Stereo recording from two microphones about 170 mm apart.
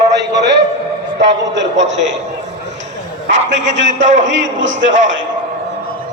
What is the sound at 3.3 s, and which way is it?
Speech, 90° right.